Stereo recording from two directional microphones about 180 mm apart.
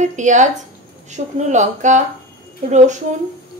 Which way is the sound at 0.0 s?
40° right (ahead or behind).